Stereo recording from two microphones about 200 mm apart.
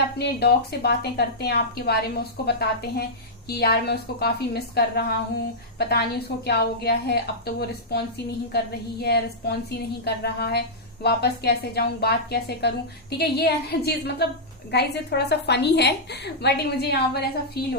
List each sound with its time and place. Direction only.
0.2 s a woman's voice: 55° left (ahead or behind)